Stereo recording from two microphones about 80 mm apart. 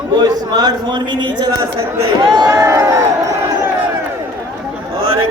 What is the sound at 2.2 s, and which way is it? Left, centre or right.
Speech, right.